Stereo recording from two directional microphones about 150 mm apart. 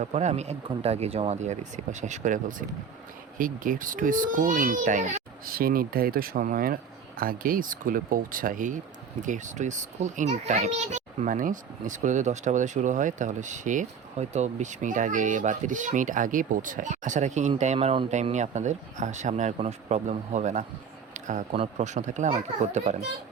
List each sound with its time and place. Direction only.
0.0 s a child's voice: 50° right (ahead or behind)
5.5 s a child's voice: 75° right (ahead or behind); by 18.1 s 35° right (ahead or behind)
18.1 s speech: 50° right (ahead or behind)
21.1 s a sound: 55° right (ahead or behind)
21.5 s speech: 45° right (ahead or behind)